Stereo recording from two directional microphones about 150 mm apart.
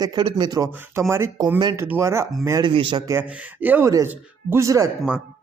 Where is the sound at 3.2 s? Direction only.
10° right (ahead or behind).